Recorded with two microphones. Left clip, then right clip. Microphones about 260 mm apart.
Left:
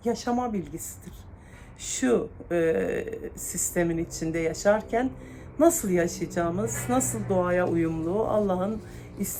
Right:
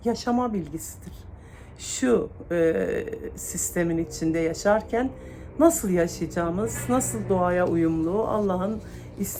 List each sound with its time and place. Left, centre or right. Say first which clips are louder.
0.0 s a woman's voice: right 2 dB; centre
1.8 s a woman's voice: right 2 dB; centre